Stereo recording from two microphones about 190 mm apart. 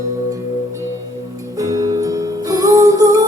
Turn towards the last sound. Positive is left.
turn(degrees=-20)  # may be behind; listen again after turning